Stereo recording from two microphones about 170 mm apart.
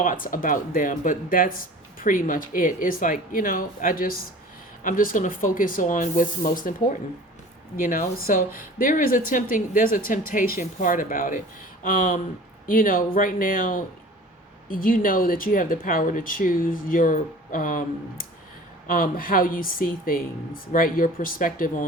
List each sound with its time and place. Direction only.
0.0 s a woman's voice: 50° left (ahead or behind)
7.9 s a woman's voice: 50° left (ahead or behind)